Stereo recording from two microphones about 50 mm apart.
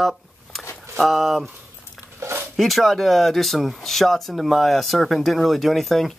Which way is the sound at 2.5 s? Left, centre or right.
Centre.